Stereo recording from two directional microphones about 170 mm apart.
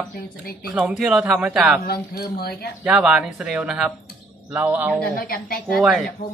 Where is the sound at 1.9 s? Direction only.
65° left (ahead or behind).